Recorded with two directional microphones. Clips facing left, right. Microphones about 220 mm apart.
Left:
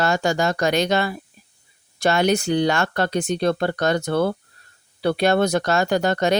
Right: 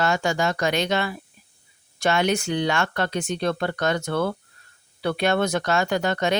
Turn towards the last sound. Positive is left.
turn(degrees=40)  # may be behind; listen again after turning